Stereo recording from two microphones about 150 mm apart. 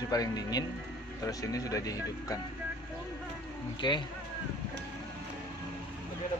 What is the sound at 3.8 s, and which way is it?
Speech, 30° left (ahead or behind).